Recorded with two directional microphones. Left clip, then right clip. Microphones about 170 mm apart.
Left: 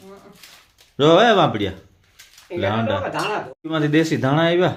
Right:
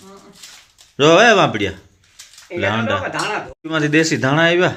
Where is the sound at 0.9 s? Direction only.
Centre (ahead or behind).